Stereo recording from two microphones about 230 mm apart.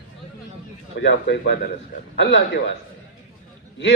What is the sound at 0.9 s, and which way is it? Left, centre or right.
A man's voice, left.